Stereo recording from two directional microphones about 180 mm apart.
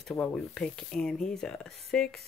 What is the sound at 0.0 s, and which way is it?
Speech, 5° left (ahead or behind).